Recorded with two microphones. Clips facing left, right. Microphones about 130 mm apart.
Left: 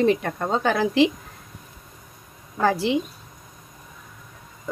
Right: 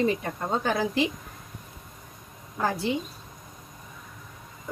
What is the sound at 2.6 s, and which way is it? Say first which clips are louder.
Speech: left 6 dB; 90° left.